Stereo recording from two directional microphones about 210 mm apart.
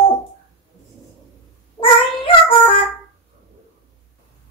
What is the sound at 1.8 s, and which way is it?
Cat, 25° left (ahead or behind).